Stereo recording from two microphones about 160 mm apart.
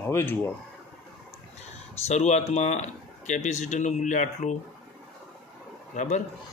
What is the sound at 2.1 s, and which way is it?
Speech, 45° left (ahead or behind).